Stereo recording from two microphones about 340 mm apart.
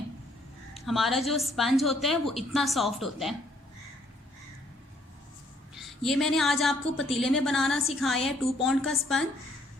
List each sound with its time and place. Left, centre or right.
0.7 s a woman's voice: centre
5.7 s a woman's voice: centre